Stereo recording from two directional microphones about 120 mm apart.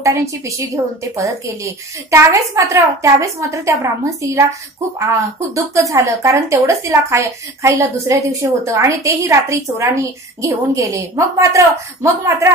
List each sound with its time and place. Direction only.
0.0 s a woman's voice: 25° right (ahead or behind)